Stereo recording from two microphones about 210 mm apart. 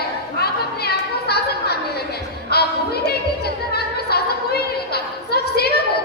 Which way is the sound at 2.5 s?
50° left (ahead or behind).